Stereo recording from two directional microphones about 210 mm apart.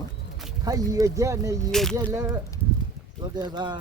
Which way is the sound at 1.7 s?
Centre (ahead or behind).